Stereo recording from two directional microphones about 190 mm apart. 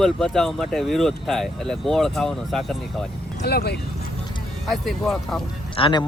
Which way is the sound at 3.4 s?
60° left (ahead or behind).